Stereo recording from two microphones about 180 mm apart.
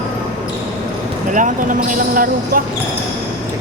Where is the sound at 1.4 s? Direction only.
45° right (ahead or behind).